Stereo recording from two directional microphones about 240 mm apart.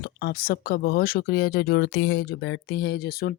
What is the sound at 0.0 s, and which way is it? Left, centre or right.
Speech, left.